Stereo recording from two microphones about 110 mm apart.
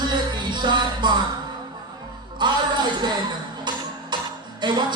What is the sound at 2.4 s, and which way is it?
Music, 40° right (ahead or behind).